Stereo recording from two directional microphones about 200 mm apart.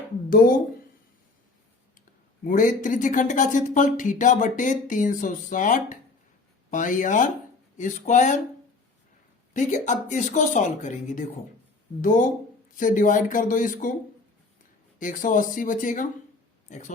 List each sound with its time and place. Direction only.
0.3 s speech: 45° left (ahead or behind)
2.0 s speech: 40° left (ahead or behind)
9.5 s speech: 40° left (ahead or behind)
14.9 s speech: 40° left (ahead or behind)